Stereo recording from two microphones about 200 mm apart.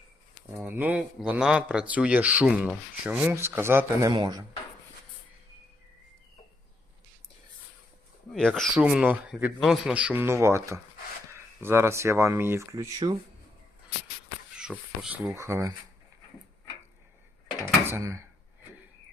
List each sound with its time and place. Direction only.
0.6 s speech: 10° right (ahead or behind)
8.3 s speech: 5° left (ahead or behind); by 13.1 s 15° right (ahead or behind)
15.0 s speech: 10° right (ahead or behind)
17.8 s speech: 15° right (ahead or behind)